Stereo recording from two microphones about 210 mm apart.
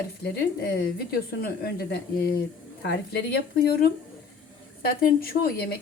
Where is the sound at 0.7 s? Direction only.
45° left (ahead or behind).